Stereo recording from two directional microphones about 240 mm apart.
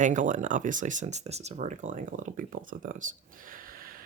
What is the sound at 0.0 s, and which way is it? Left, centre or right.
Speech, right.